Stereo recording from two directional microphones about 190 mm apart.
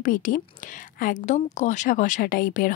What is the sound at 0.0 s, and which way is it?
Speech, 45° left (ahead or behind).